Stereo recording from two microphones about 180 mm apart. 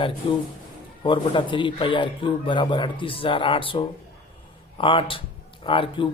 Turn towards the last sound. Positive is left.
turn(degrees=30)  # may be behind; listen again after turning